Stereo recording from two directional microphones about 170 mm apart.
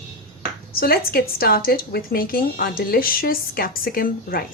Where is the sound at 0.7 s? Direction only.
60° left (ahead or behind).